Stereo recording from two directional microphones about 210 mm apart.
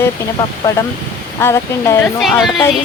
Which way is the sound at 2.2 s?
Centre (ahead or behind).